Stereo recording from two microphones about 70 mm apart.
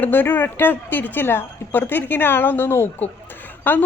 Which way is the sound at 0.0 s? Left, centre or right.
Left.